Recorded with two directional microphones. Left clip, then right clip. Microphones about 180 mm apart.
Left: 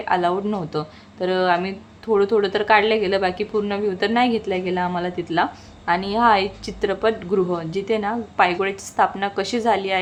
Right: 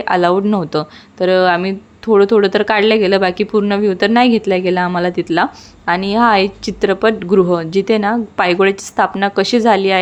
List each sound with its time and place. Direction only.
0.0 s speech: 35° right (ahead or behind)